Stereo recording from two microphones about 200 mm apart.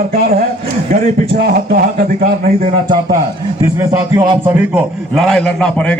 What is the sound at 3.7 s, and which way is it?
Music, 15° right (ahead or behind).